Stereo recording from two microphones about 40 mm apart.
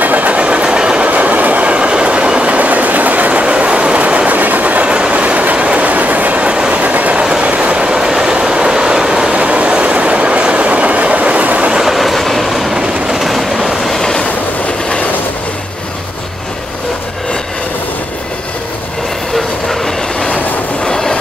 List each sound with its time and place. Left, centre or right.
0.0 s train: right
1.0 s train: right
2.4 s train: right
4.3 s train: right
4.8 s train: right
7.4 s vehicle: right
9.3 s train: right
11.8 s train: centre
12.7 s train: centre
13.2 s train: centre
20.8 s train: centre